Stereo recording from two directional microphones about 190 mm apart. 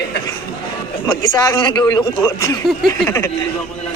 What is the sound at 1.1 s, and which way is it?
A man's voice, 20° left (ahead or behind).